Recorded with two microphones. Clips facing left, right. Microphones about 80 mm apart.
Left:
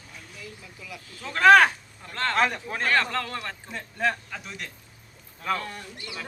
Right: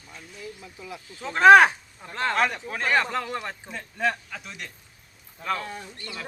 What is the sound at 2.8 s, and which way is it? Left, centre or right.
Speech, centre.